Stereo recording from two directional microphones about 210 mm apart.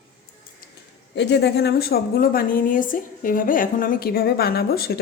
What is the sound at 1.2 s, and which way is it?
A woman's voice, 55° left (ahead or behind).